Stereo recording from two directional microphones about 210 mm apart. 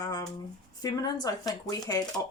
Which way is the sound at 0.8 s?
20° left (ahead or behind).